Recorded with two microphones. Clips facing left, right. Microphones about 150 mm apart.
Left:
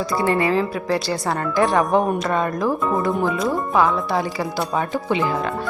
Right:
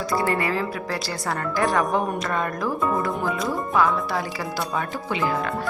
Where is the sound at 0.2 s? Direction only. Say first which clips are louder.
Left 7 dB; 25° left (ahead or behind).